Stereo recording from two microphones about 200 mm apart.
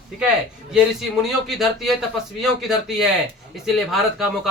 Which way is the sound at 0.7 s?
Centre (ahead or behind).